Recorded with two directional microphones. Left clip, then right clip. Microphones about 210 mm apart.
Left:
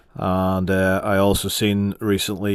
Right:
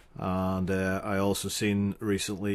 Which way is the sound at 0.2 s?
30° left (ahead or behind).